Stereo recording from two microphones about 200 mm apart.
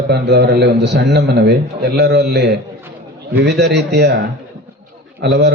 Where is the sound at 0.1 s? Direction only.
55° right (ahead or behind).